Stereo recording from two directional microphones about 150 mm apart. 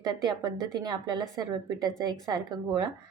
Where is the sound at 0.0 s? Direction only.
25° right (ahead or behind).